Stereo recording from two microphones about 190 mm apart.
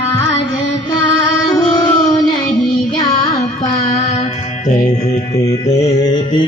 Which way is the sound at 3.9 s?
35° left (ahead or behind).